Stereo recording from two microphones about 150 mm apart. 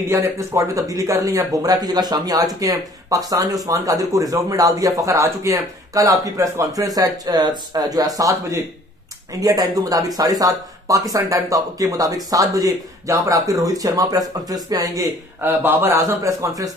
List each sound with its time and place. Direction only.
0.1 s speech: 20° right (ahead or behind)